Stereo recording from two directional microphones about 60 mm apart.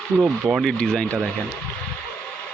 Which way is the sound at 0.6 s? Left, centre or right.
Centre.